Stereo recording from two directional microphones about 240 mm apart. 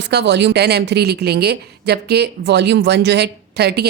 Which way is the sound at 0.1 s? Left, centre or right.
Right.